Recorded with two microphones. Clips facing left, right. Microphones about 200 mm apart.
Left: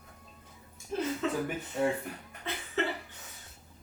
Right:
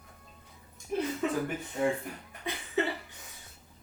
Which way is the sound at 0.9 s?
15° right (ahead or behind).